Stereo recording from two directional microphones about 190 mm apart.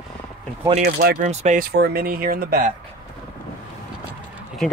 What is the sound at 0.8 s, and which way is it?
Speech, 55° right (ahead or behind).